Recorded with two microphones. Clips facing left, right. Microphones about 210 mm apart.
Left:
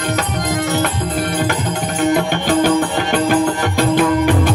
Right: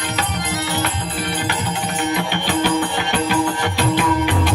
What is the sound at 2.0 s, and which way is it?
Music, 50° left (ahead or behind).